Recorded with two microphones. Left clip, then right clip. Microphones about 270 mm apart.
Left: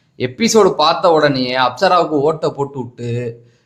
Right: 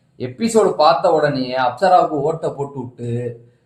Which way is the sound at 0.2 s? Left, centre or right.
Left.